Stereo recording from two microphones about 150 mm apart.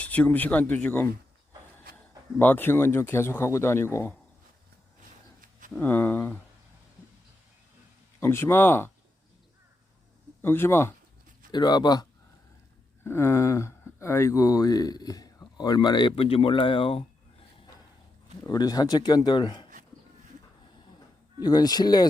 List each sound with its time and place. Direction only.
0.0 s speech: 10° left (ahead or behind)
2.4 s speech: 15° left (ahead or behind)
5.4 s a sound: 65° right (ahead or behind)
5.7 s speech: 10° left (ahead or behind)
8.2 s speech: 15° left (ahead or behind)
10.4 s speech: 15° left (ahead or behind)
11.5 s speech: 30° left (ahead or behind)
13.1 s speech: 15° left (ahead or behind); by 17.1 s 35° left (ahead or behind)
18.4 s speech: 25° left (ahead or behind)
21.4 s speech: 25° left (ahead or behind)